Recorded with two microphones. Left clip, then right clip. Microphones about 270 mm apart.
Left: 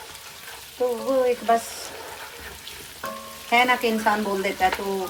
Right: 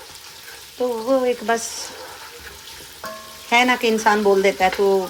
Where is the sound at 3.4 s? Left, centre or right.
Right.